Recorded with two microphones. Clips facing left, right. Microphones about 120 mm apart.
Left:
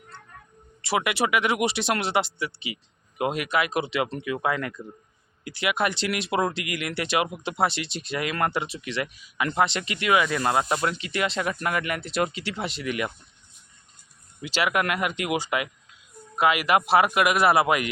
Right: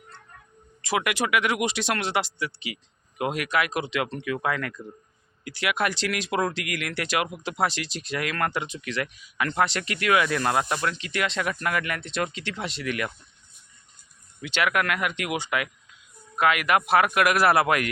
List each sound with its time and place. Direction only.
0.8 s speech: 5° left (ahead or behind)
14.7 s speech: 15° left (ahead or behind)
15.4 s speech: 20° left (ahead or behind); by 17.8 s 5° left (ahead or behind)